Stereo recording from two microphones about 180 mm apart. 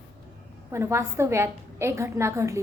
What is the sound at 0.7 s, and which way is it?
A woman's voice, 15° right (ahead or behind).